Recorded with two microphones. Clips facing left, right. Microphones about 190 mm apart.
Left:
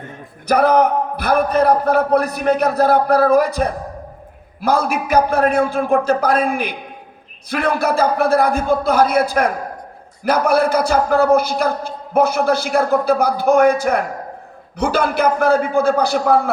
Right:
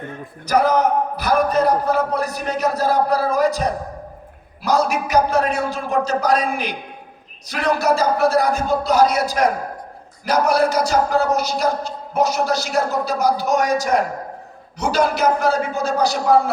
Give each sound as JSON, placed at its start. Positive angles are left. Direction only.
{"t": 0.4, "sound": "a man's voice", "side_deg": 60}